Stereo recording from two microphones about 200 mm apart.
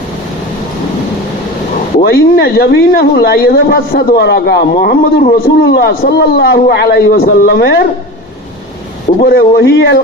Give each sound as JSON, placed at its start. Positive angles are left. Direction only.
{"t": 2.0, "sound": "speech", "side_deg": 50}
{"t": 9.2, "sound": "speech", "side_deg": 55}